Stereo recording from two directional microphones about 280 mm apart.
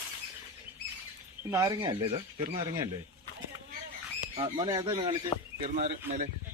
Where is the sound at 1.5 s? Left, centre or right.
Centre.